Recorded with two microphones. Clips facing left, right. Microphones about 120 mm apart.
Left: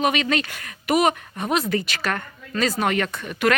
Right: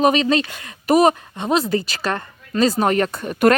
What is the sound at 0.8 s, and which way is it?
A woman's voice, 35° right (ahead or behind).